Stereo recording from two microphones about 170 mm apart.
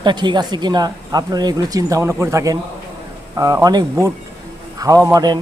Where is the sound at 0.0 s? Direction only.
25° right (ahead or behind).